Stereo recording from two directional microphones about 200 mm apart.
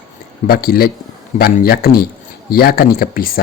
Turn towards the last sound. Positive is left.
turn(degrees=45)  # may be behind; listen again after turning